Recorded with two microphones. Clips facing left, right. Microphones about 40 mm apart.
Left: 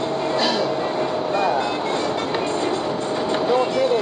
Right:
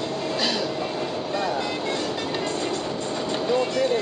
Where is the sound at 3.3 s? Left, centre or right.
Centre.